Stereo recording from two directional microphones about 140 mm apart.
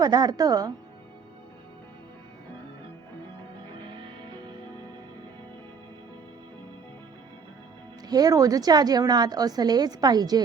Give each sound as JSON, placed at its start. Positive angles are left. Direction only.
{"t": 0.0, "sound": "a woman's voice", "side_deg": -25}
{"t": 8.0, "sound": "a woman's voice", "side_deg": -25}